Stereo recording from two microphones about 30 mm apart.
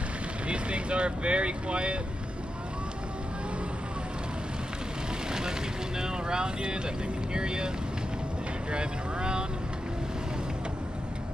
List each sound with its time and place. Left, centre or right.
0.5 s speech: right
5.3 s speech: right
8.7 s speech: right